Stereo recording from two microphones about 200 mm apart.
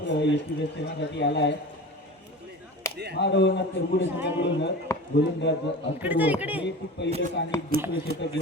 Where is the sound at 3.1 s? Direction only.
60° left (ahead or behind).